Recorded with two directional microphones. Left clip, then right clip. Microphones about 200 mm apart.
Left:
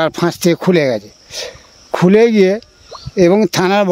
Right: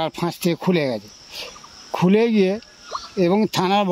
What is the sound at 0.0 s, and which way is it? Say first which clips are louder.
Speech: left 9 dB; 50° left (ahead or behind).